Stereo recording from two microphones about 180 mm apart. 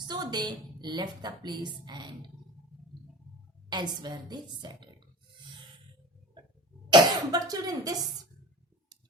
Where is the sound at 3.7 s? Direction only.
25° right (ahead or behind).